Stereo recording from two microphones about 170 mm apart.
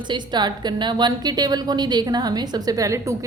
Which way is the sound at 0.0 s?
25° right (ahead or behind).